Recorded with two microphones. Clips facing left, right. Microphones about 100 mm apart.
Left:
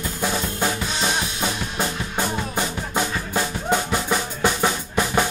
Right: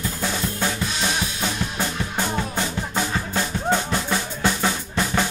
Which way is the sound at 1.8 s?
15° left (ahead or behind).